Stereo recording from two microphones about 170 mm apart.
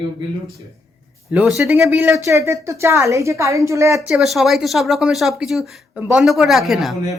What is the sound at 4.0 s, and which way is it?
Speech, centre (ahead or behind).